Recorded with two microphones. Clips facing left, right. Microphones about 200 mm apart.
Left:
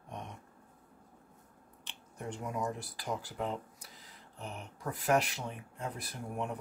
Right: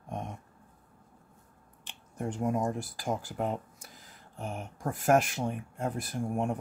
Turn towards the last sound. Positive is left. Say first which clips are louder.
# right 7 dB
turn(degrees=-45)  # may be behind; listen again after turning